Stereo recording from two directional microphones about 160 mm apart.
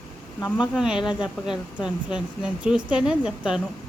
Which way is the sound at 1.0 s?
30° left (ahead or behind).